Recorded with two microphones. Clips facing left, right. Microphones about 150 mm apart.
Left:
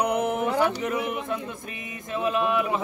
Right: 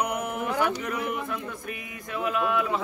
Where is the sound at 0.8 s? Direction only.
25° left (ahead or behind).